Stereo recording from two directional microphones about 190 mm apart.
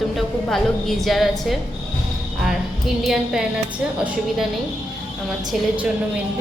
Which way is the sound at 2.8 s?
Centre (ahead or behind).